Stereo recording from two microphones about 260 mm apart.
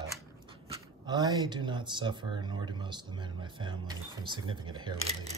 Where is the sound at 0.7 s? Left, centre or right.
Centre.